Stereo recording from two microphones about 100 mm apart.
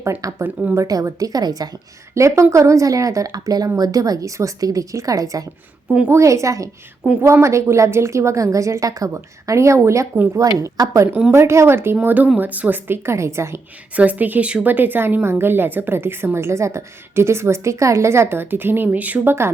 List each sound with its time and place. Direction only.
0.0 s a woman's voice: 30° right (ahead or behind)
0.4 s speech: 15° right (ahead or behind)
0.8 s speech: 35° right (ahead or behind)
2.1 s speech: 30° right (ahead or behind)
7.0 s a woman's voice: 20° right (ahead or behind)
13.9 s a woman's voice: 15° right (ahead or behind)